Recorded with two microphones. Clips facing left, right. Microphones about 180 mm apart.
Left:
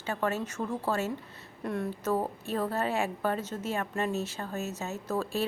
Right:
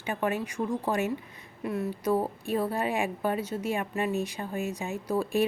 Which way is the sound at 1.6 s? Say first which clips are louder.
Right 2 dB; 5° right (ahead or behind).